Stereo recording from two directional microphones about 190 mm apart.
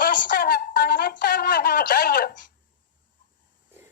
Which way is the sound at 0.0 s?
45° left (ahead or behind).